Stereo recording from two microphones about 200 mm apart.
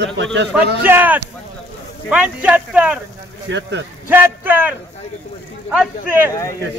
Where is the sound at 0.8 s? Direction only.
10° right (ahead or behind).